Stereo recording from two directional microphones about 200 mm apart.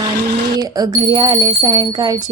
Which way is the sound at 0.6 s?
20° right (ahead or behind).